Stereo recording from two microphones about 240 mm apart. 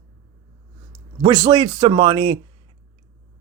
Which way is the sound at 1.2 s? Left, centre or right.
Centre.